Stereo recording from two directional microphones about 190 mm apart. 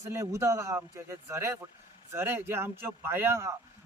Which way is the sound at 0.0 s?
15° right (ahead or behind).